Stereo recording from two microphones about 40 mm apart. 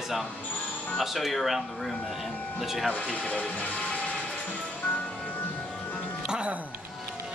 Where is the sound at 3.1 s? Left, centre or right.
Left.